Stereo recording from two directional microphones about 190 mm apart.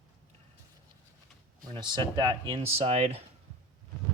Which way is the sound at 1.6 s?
20° right (ahead or behind).